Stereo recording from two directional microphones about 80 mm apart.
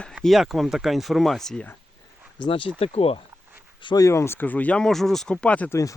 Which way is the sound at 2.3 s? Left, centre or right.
Left.